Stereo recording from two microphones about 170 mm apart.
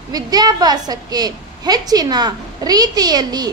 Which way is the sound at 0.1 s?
20° right (ahead or behind).